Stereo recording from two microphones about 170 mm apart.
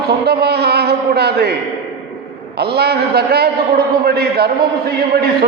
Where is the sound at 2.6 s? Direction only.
70° right (ahead or behind).